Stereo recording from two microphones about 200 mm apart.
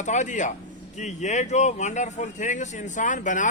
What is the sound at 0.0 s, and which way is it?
A man's voice, 35° left (ahead or behind).